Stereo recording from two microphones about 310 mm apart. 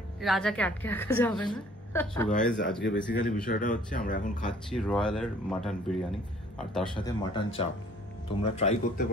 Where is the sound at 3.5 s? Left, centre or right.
Left.